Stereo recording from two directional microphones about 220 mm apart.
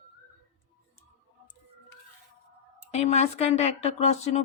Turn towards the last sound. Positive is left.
turn(degrees=30)  # may be behind; listen again after turning